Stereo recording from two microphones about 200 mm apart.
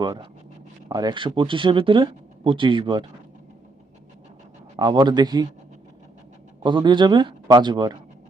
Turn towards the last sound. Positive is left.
turn(degrees=-20)  # may be behind; listen again after turning